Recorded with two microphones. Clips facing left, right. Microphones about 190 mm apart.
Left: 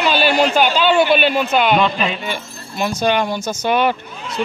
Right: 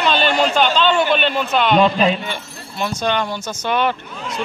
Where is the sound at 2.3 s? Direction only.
10° left (ahead or behind).